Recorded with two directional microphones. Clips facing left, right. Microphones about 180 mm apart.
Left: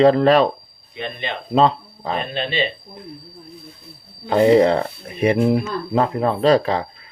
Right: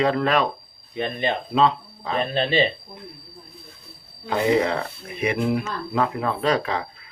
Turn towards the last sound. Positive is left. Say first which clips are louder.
# left 7 dB
turn(degrees=35)  # may be behind; listen again after turning